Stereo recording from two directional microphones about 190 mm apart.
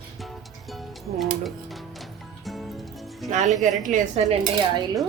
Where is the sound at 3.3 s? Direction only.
40° right (ahead or behind).